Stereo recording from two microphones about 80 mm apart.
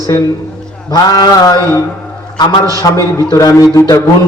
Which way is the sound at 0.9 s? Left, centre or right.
Left.